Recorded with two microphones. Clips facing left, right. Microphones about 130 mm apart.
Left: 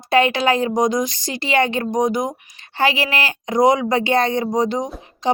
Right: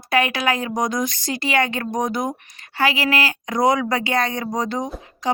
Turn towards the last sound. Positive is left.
turn(degrees=25)  # may be behind; listen again after turning